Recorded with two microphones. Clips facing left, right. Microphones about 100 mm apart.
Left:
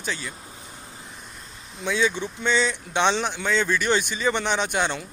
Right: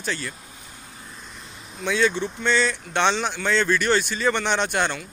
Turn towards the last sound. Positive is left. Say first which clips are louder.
# right 1 dB
turn(degrees=10)  # may be behind; listen again after turning